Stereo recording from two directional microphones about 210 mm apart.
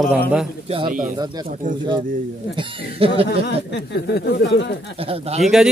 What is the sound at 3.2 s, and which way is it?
Speech, 55° left (ahead or behind).